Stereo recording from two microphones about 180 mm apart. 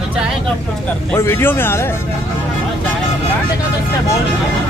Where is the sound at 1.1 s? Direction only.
15° left (ahead or behind).